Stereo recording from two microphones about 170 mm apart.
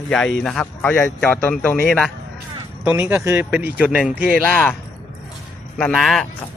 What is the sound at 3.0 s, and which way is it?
Speech, 10° right (ahead or behind).